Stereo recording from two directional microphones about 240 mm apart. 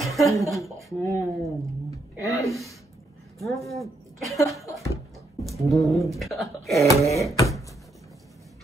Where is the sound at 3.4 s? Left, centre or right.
Centre.